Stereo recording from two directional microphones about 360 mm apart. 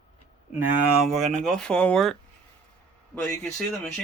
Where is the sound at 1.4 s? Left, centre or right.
Centre.